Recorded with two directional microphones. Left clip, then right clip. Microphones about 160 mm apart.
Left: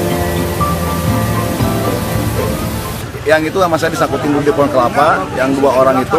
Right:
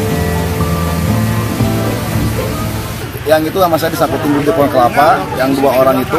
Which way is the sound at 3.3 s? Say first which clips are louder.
Right 1 dB; centre (ahead or behind).